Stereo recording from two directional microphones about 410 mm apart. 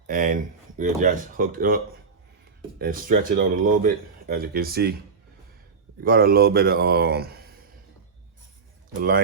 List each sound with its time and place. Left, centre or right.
0.1 s speech: centre
6.0 s speech: right
9.0 s speech: right